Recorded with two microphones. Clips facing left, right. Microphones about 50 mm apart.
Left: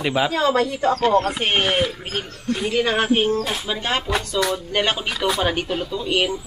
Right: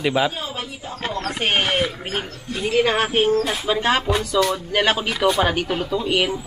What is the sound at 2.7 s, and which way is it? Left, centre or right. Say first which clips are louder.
Speech: right 3 dB; centre.